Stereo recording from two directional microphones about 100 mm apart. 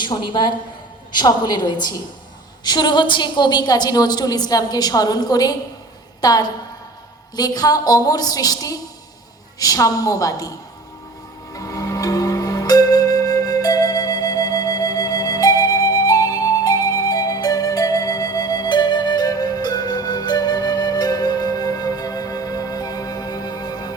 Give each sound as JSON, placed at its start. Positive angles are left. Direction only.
{"t": 0.0, "sound": "a woman's voice", "side_deg": 50}
{"t": 11.5, "sound": "music", "side_deg": 35}